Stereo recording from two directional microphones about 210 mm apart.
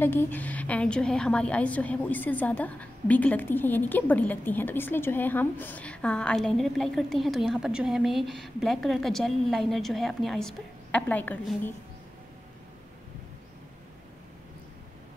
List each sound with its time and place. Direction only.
0.0 s a woman's voice: 10° left (ahead or behind)